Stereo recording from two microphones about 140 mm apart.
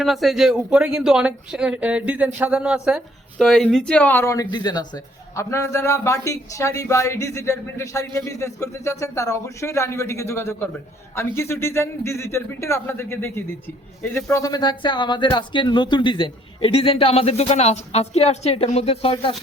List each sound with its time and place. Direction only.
0.0 s speech: centre (ahead or behind)
14.3 s speech: 25° left (ahead or behind); by 19.4 s 40° left (ahead or behind)